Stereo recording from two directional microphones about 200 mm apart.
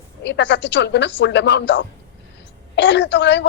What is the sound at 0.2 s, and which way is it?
A woman's voice, 60° left (ahead or behind).